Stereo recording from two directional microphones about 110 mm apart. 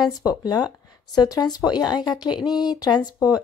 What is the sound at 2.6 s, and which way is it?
Speech, 40° left (ahead or behind).